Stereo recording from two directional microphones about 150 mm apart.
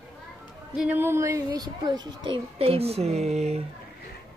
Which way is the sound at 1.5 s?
30° right (ahead or behind).